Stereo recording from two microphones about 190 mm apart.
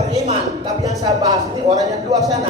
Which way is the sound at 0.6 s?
20° right (ahead or behind).